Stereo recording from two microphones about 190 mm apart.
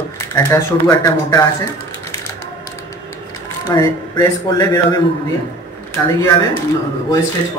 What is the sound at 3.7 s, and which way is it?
A woman's voice, 20° left (ahead or behind).